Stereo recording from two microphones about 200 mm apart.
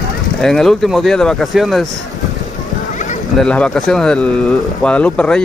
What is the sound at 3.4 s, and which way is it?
Speech, 5° left (ahead or behind).